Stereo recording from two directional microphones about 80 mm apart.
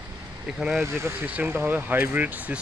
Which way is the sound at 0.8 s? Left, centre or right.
Right.